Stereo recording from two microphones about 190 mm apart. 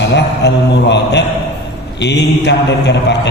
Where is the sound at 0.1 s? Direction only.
65° left (ahead or behind).